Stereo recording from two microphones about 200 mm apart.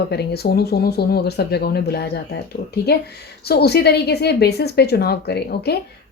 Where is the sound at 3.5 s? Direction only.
50° left (ahead or behind).